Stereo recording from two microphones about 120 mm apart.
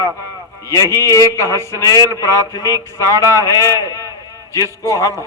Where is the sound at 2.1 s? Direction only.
25° left (ahead or behind).